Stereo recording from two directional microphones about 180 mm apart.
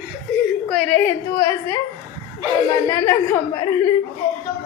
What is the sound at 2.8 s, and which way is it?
A woman's voice, 15° left (ahead or behind).